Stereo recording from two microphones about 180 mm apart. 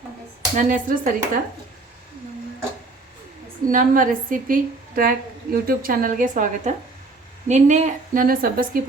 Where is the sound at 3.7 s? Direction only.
50° right (ahead or behind).